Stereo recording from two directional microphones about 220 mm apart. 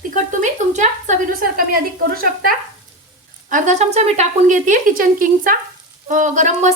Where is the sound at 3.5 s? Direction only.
30° right (ahead or behind).